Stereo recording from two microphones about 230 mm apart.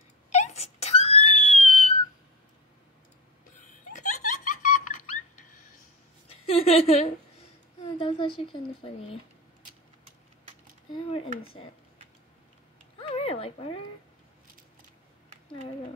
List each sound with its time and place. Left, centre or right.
0.3 s wail: left
3.6 s a sound: left
6.2 s a sound: left
8.1 s speech: left
10.9 s speech: left
13.1 s speech: left